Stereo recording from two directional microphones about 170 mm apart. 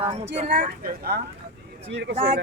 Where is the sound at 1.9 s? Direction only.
90° right.